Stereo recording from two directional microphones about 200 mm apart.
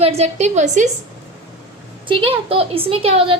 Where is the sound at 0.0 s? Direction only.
35° right (ahead or behind).